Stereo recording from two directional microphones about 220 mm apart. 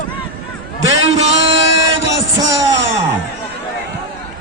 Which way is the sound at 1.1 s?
30° right (ahead or behind).